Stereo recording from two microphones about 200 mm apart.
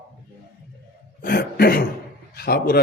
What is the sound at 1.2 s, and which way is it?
Cough, 50° left (ahead or behind).